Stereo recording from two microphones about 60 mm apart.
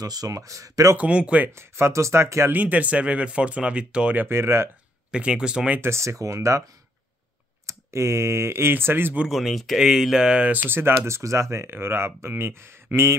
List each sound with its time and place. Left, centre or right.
0.0 s speech: right
0.9 s speech: centre
1.5 s speech: right
2.5 s speech: right
4.2 s speech: right
5.1 s speech: centre
5.8 s speech: right
7.6 s speech: right
9.3 s speech: centre
10.5 s speech: right
11.7 s speech: right